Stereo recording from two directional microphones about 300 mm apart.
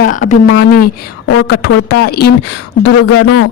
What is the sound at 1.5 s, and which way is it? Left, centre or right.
A woman's voice, left.